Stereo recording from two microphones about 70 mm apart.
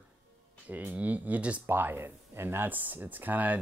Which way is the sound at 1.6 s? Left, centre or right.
Right.